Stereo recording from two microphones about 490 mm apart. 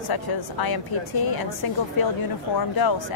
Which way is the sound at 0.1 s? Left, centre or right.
Left.